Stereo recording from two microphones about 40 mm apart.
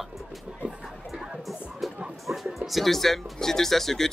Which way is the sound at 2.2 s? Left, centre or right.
Centre.